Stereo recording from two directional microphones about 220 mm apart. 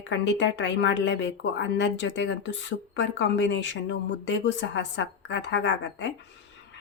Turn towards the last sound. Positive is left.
turn(degrees=55)  # may be behind; listen again after turning